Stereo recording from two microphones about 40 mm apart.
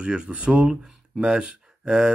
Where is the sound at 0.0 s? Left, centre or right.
Right.